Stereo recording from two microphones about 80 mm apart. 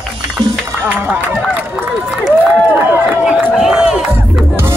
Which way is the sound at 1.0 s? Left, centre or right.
Right.